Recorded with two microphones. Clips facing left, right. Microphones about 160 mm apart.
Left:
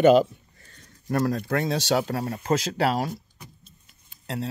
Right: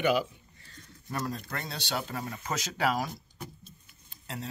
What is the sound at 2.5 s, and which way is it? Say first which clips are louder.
Speech: left 6 dB; 30° left (ahead or behind).